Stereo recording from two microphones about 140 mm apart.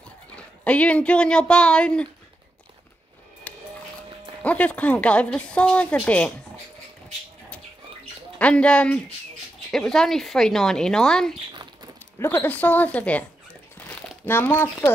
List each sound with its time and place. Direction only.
0.7 s a woman's voice: 10° left (ahead or behind)
3.5 s music: 10° left (ahead or behind)
4.4 s a woman's voice: 10° left (ahead or behind)
8.4 s a woman's voice: 10° left (ahead or behind)
13.7 s crumpling: 10° left (ahead or behind)